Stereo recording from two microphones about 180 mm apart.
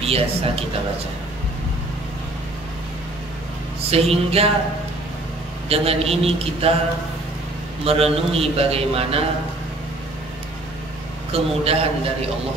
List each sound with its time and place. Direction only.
0.0 s a man's voice: 35° right (ahead or behind)
3.9 s a man's voice: 35° right (ahead or behind)
5.7 s a man's voice: 35° right (ahead or behind)
7.8 s a man's voice: 35° right (ahead or behind)
11.3 s a man's voice: 35° right (ahead or behind)